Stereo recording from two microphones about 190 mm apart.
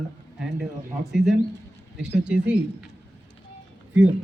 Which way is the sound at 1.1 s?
Centre (ahead or behind).